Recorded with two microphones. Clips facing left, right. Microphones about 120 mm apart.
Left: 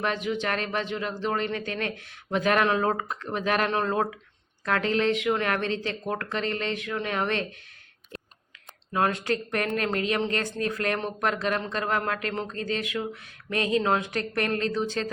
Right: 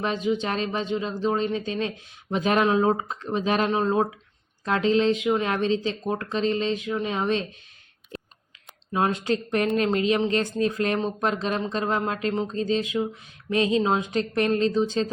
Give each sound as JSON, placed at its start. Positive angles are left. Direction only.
{"t": 0.0, "sound": "speech", "side_deg": -20}
{"t": 8.9, "sound": "speech", "side_deg": -20}